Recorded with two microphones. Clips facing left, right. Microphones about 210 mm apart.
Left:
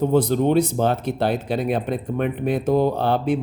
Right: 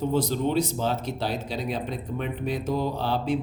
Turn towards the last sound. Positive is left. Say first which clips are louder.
# left 6 dB
turn(degrees=55)  # may be behind; listen again after turning